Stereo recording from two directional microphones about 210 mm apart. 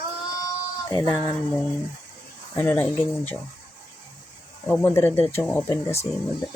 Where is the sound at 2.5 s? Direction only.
10° left (ahead or behind).